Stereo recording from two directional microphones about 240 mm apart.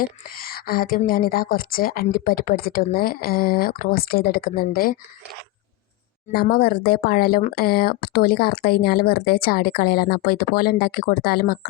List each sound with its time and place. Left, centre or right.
0.0 s a woman's voice: left
6.3 s a woman's voice: left